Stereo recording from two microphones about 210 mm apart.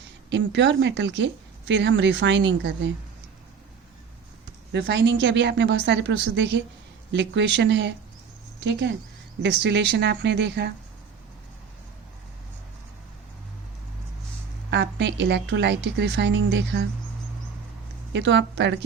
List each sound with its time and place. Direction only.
0.3 s speech: 55° right (ahead or behind)
4.7 s speech: 55° right (ahead or behind)
9.4 s speech: 55° right (ahead or behind)
14.7 s speech: 55° right (ahead or behind)
18.1 s speech: 60° right (ahead or behind)